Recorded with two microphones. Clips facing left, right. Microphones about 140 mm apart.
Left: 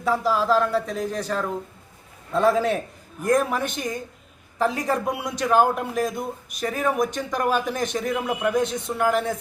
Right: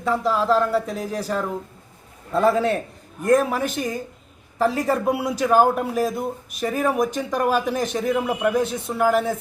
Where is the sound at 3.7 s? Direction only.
35° right (ahead or behind).